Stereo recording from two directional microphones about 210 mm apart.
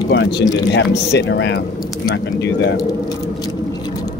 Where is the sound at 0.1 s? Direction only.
55° left (ahead or behind).